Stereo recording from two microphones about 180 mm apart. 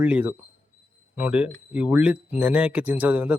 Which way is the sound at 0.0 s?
10° right (ahead or behind).